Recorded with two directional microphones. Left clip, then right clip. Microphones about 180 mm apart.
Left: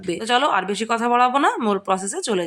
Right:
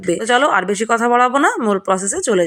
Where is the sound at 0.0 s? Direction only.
25° right (ahead or behind).